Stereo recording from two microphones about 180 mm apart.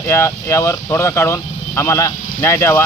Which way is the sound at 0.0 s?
15° left (ahead or behind).